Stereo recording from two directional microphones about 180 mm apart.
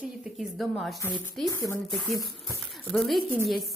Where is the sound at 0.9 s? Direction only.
10° left (ahead or behind).